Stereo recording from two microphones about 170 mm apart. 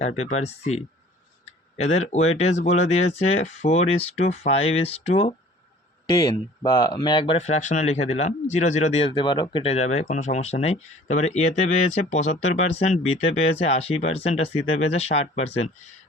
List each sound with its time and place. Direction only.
0.0 s speech: 40° left (ahead or behind)
6.1 s speech: 20° left (ahead or behind); by 15.7 s 35° left (ahead or behind)